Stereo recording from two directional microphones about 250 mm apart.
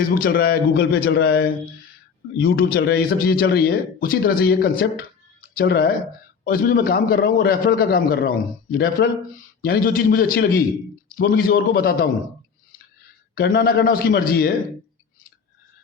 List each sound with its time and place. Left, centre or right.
0.1 s a man's voice: left
13.3 s a man's voice: left